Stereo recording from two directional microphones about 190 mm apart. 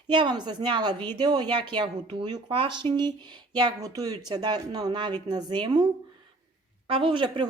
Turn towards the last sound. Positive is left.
turn(degrees=-25)  # may be behind; listen again after turning